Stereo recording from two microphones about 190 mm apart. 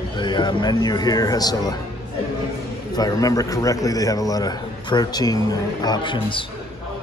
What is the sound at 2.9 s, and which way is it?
A man's voice, 20° left (ahead or behind).